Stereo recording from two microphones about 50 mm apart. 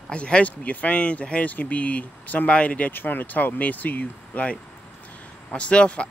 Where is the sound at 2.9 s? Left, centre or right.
Left.